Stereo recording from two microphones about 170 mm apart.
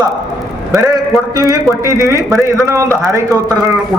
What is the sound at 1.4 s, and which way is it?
A man's voice, 20° right (ahead or behind).